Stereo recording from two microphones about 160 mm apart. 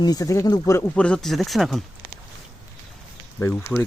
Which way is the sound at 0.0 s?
25° left (ahead or behind).